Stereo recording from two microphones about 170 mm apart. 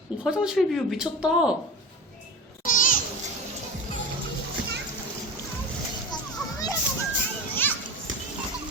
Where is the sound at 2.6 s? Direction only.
50° left (ahead or behind).